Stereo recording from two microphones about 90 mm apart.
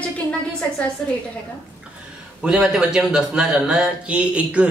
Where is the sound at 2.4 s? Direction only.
5° right (ahead or behind).